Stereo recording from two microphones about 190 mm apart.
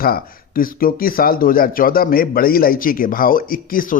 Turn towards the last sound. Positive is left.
turn(degrees=45)  # may be behind; listen again after turning